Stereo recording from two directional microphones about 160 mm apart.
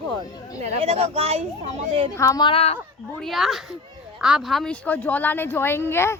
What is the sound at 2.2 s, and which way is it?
Speech, 25° left (ahead or behind).